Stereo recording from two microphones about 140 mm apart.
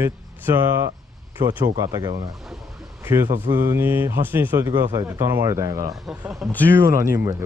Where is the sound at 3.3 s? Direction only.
20° right (ahead or behind).